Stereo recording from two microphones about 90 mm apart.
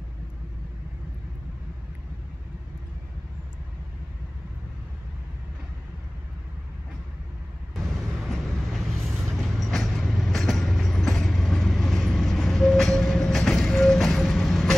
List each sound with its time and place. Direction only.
7.7 s vehicle: centre (ahead or behind)